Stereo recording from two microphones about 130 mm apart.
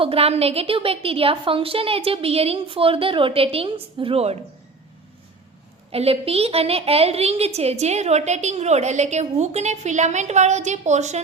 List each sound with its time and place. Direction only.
0.0 s a woman's voice: 50° right (ahead or behind)
5.9 s a woman's voice: 50° right (ahead or behind)